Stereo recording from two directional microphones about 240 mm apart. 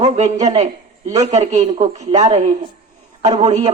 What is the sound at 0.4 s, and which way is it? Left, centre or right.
A woman's voice, right.